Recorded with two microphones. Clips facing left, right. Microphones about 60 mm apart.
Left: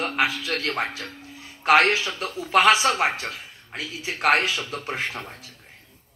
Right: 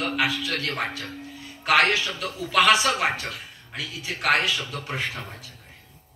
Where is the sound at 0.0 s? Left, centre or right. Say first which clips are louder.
Left 1 dB; left.